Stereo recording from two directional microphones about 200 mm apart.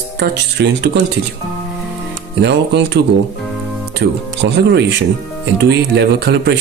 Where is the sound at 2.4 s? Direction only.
60° right (ahead or behind).